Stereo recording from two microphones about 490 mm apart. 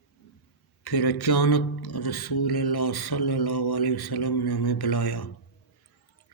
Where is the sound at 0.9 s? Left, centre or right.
Left.